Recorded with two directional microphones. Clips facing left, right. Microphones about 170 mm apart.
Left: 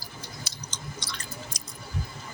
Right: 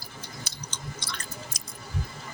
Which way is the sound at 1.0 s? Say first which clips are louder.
Right 1 dB; 55° right (ahead or behind).